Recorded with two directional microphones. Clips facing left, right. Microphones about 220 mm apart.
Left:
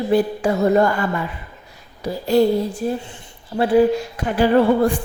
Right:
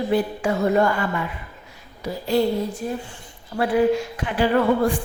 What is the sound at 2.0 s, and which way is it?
Speech, 35° left (ahead or behind).